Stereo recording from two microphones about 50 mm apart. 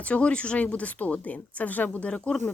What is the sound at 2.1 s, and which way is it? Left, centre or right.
Speech, centre.